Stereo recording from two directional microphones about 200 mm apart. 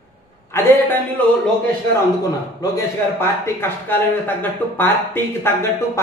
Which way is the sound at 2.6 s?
20° left (ahead or behind).